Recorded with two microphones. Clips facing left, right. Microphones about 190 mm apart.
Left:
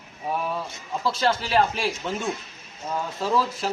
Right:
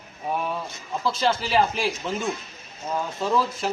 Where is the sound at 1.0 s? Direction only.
Centre (ahead or behind).